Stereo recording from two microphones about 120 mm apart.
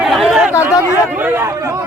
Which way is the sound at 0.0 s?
Centre (ahead or behind).